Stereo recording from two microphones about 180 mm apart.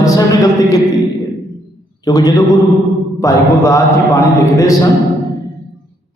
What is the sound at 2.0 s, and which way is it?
A man's voice, 20° left (ahead or behind).